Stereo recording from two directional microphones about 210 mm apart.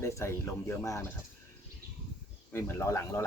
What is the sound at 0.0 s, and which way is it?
Speech, 10° left (ahead or behind).